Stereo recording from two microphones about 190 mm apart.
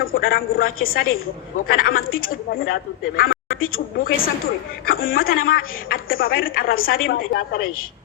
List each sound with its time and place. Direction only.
0.0 s a woman's voice: 50° left (ahead or behind)